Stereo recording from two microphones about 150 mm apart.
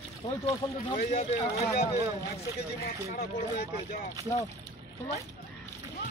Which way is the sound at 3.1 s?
90° left.